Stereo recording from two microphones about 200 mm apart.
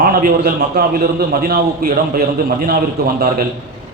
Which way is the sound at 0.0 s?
45° right (ahead or behind).